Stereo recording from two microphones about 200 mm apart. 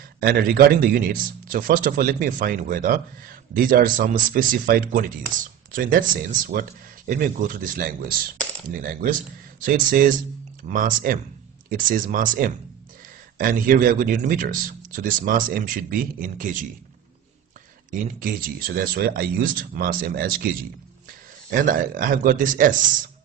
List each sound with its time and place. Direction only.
0.2 s a man's voice: 50° right (ahead or behind)
18.2 s a man's voice: 45° right (ahead or behind)